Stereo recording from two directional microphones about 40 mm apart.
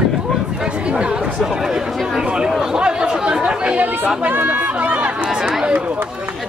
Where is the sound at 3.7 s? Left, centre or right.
Right.